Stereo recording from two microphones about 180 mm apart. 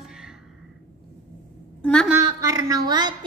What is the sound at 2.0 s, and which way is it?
A woman's voice, 15° right (ahead or behind).